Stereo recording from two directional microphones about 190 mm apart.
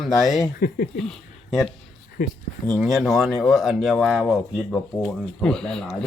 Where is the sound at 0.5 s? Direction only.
55° left (ahead or behind).